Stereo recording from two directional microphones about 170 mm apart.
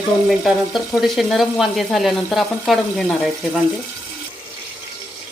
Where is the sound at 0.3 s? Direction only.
Centre (ahead or behind).